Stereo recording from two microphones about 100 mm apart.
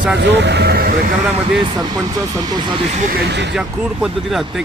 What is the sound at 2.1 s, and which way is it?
Speech, 40° right (ahead or behind).